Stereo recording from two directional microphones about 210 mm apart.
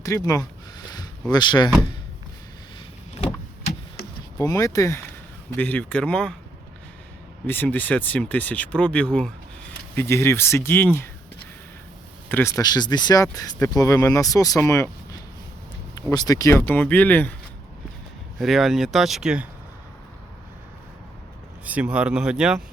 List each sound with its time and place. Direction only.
0.0 s speech: 15° left (ahead or behind)
4.4 s speech: 15° left (ahead or behind)
7.4 s speech: 10° left (ahead or behind)
12.3 s speech: 15° left (ahead or behind)
16.0 s speech: 15° left (ahead or behind)
18.3 s speech: centre (ahead or behind)
21.6 s speech: 5° right (ahead or behind)